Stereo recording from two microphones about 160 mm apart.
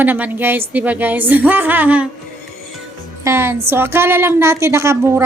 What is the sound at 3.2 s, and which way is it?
A woman's voice, 15° right (ahead or behind).